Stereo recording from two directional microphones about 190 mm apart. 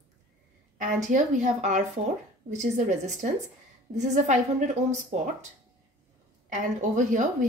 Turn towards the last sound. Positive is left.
turn(degrees=-40)  # may be behind; listen again after turning